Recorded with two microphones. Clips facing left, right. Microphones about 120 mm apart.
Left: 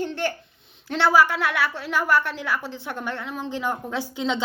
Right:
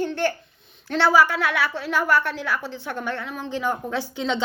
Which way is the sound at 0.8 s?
15° left (ahead or behind).